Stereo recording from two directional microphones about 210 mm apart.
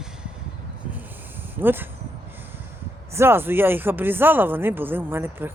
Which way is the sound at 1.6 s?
10° right (ahead or behind).